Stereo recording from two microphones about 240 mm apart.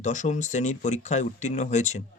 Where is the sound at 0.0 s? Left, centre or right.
Left.